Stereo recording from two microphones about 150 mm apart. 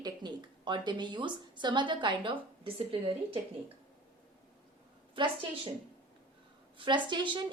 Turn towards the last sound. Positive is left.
turn(degrees=-30)  # may be behind; listen again after turning